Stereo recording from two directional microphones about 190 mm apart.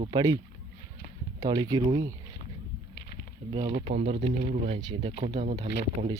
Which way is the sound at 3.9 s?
35° right (ahead or behind).